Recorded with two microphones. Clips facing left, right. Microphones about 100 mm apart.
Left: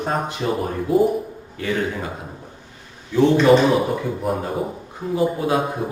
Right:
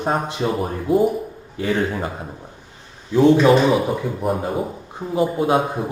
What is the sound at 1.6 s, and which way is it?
Speech, 35° right (ahead or behind).